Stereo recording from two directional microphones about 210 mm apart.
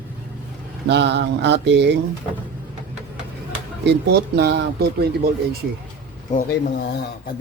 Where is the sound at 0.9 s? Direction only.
55° right (ahead or behind).